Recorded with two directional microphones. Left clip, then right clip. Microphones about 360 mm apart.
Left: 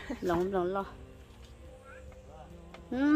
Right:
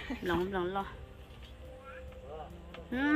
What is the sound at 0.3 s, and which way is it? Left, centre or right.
Speech, left.